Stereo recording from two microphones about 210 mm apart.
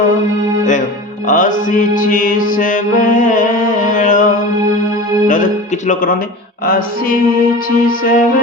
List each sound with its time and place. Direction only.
1.3 s mantra: 40° left (ahead or behind)
5.9 s speech: 40° left (ahead or behind)
6.7 s music: 45° left (ahead or behind)